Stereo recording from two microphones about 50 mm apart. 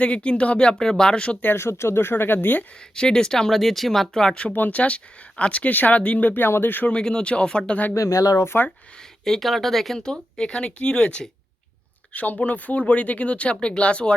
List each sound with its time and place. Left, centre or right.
0.0 s speech: left
1.5 s speech: left
2.9 s speech: centre
3.5 s speech: centre
4.5 s speech: left
5.4 s speech: left
6.8 s speech: centre
7.9 s speech: left
9.2 s speech: centre
10.0 s speech: centre